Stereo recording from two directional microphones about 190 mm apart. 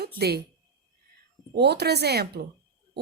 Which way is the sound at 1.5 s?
60° right (ahead or behind).